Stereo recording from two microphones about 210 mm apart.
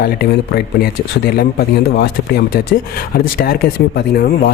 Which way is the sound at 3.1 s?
45° left (ahead or behind).